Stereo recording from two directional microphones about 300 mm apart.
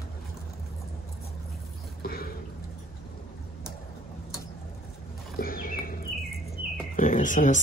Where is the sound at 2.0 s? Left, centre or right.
Left.